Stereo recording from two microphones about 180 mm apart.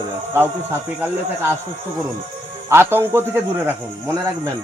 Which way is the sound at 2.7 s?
15° right (ahead or behind).